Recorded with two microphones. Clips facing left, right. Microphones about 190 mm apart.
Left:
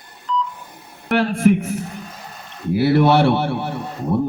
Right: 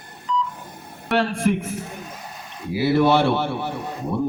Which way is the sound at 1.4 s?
55° left (ahead or behind).